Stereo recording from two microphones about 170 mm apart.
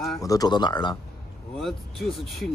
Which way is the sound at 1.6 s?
Centre (ahead or behind).